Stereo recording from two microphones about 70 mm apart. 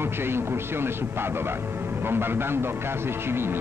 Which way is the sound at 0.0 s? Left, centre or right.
Right.